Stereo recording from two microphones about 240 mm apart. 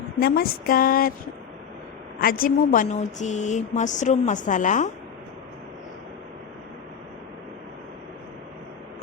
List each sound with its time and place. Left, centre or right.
0.2 s speech: left
2.2 s speech: left